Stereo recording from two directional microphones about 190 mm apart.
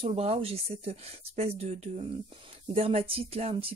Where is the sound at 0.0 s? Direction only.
30° right (ahead or behind).